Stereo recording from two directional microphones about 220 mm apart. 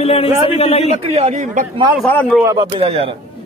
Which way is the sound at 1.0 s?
25° right (ahead or behind).